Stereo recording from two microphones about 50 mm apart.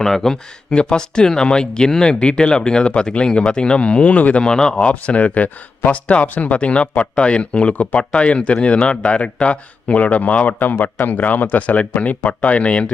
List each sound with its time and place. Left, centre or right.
0.0 s speech: centre; by 4.4 s left
4.4 s speech: centre
4.9 s speech: left